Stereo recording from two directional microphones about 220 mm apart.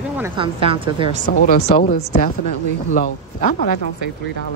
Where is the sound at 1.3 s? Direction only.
45° left (ahead or behind).